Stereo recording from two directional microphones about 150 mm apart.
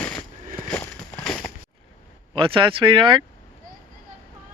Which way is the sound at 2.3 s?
35° right (ahead or behind).